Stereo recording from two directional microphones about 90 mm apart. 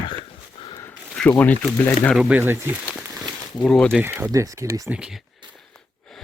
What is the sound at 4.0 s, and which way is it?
Speech, 25° right (ahead or behind).